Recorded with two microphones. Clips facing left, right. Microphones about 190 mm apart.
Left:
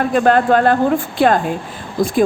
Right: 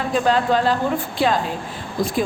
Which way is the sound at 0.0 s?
55° left (ahead or behind).